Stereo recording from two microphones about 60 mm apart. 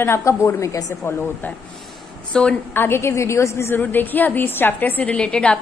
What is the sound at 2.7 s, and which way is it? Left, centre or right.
A woman's voice, left.